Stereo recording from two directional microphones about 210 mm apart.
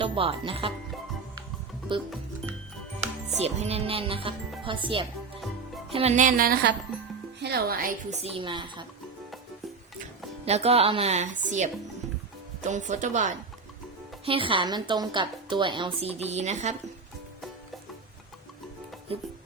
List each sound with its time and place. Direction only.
0.0 s speech: 25° right (ahead or behind)
1.9 s a woman's voice: 25° right (ahead or behind)
3.4 s a woman's voice: 30° right (ahead or behind)
10.0 s a woman's voice: 30° right (ahead or behind)
14.3 s a woman's voice: 25° right (ahead or behind)